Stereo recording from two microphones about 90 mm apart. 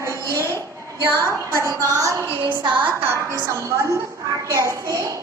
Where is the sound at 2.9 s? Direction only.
25° right (ahead or behind).